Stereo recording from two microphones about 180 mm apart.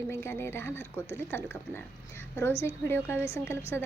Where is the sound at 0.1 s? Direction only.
15° left (ahead or behind).